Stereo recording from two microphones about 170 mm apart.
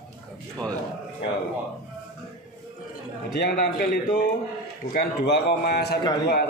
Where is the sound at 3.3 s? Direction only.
65° left (ahead or behind).